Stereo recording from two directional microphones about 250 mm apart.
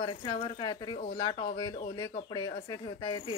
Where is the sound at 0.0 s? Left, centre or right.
Centre.